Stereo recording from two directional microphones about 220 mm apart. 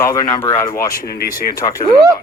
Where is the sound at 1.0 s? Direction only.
40° left (ahead or behind).